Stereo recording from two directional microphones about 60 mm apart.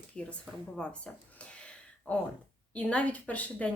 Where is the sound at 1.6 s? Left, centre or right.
Centre.